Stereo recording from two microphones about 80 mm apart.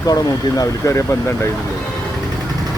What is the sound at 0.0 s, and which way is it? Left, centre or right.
Speech, left.